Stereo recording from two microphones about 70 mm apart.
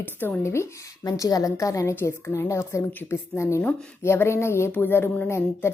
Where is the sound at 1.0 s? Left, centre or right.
Left.